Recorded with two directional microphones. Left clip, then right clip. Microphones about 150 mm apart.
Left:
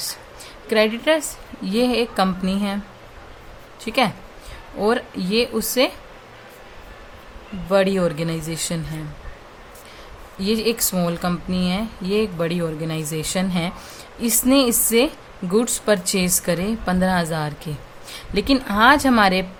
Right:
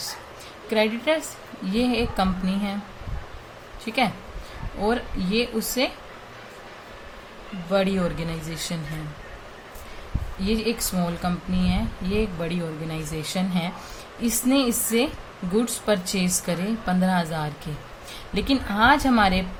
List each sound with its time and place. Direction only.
0.7 s speech: 50° left (ahead or behind)
3.8 s speech: 50° left (ahead or behind)
7.7 s speech: 50° left (ahead or behind)
10.4 s speech: 50° left (ahead or behind)